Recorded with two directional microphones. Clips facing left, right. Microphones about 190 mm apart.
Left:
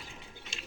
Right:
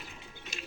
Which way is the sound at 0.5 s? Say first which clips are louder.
Right 5 dB; 25° left (ahead or behind).